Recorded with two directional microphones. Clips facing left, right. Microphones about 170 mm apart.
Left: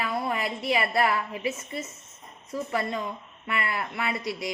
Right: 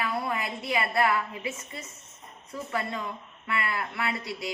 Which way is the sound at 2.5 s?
25° left (ahead or behind).